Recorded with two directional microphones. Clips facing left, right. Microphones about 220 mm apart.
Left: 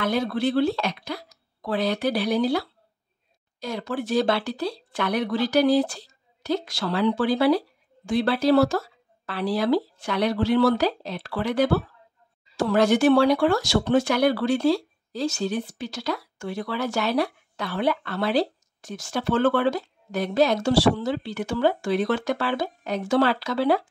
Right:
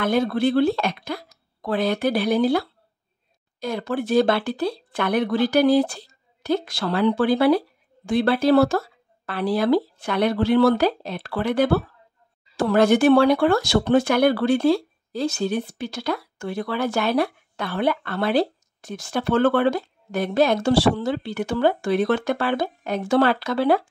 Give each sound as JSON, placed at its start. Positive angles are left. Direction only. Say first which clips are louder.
{"t": 0.0, "sound": "a woman's voice", "louder": "right 3 dB", "side_deg": -50}